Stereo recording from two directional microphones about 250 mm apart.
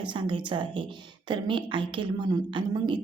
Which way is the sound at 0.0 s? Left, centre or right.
Centre.